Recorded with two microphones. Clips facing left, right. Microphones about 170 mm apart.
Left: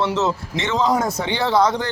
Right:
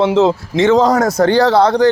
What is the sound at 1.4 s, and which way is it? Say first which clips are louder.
Speech: right 7 dB; 70° right (ahead or behind).